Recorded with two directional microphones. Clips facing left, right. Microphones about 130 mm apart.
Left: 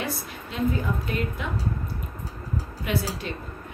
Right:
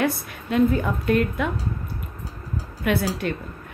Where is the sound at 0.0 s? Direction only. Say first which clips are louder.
Right 7 dB; 55° right (ahead or behind).